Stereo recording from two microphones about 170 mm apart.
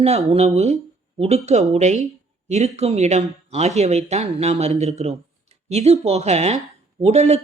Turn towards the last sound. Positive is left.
turn(degrees=-40)  # may be behind; listen again after turning